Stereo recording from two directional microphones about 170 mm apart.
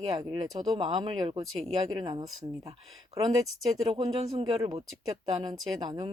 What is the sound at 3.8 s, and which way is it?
Speech, 35° right (ahead or behind).